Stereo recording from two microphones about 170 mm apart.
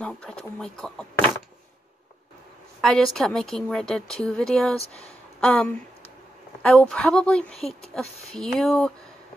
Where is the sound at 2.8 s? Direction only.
Centre (ahead or behind).